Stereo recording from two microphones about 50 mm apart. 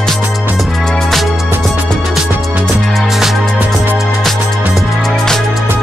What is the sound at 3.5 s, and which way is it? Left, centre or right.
Music, right.